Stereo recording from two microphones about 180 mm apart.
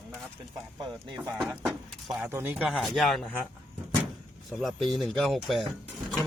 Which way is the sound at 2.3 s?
10° right (ahead or behind).